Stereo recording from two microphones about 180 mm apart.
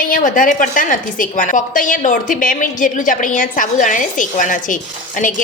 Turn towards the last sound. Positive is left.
turn(degrees=45)  # may be behind; listen again after turning